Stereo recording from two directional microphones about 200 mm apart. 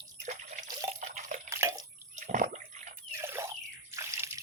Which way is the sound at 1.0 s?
35° right (ahead or behind).